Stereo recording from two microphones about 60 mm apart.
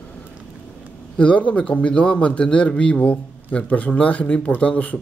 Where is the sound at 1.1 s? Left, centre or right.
Left.